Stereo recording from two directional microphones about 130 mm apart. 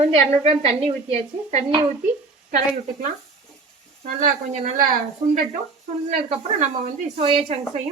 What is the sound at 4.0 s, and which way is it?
Speech, 60° right (ahead or behind).